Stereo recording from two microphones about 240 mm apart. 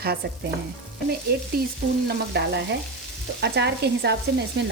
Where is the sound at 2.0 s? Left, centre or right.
Right.